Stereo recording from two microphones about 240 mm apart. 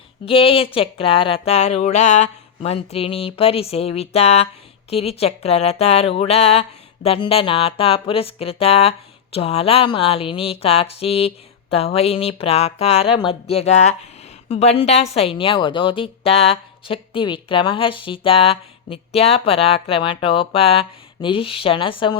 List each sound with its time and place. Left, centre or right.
0.3 s speech: left